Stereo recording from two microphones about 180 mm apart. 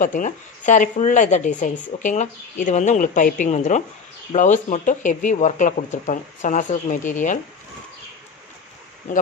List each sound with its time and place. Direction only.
0.0 s a woman's voice: 45° left (ahead or behind)